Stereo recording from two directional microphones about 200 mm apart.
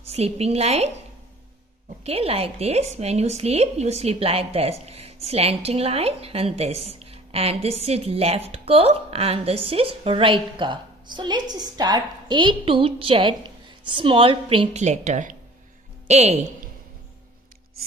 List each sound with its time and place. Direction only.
0.1 s a woman's voice: 30° right (ahead or behind)
2.0 s a woman's voice: 30° right (ahead or behind)